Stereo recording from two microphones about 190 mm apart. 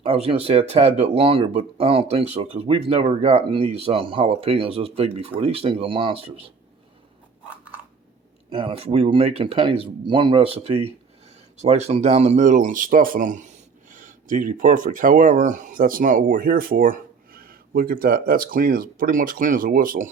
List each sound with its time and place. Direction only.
0.0 s speech: 30° right (ahead or behind)
8.4 s speech: 30° right (ahead or behind); by 20.1 s 45° right (ahead or behind)